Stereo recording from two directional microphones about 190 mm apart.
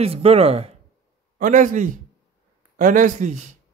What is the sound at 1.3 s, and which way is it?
A man's voice, 40° right (ahead or behind).